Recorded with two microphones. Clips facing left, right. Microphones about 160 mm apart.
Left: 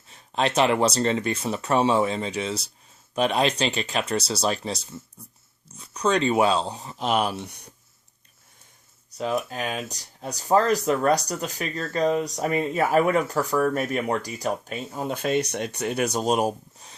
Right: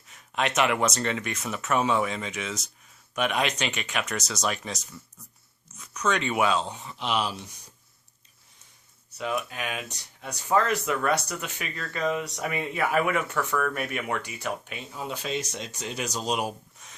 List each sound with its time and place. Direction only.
0.1 s speech: 30° left (ahead or behind); by 7.7 s 65° left (ahead or behind)
9.1 s speech: 35° left (ahead or behind)